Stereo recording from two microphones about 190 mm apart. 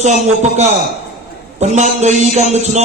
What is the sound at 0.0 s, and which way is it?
A man's voice, 35° right (ahead or behind).